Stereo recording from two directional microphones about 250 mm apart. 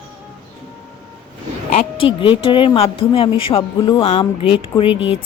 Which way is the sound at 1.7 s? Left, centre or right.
Left.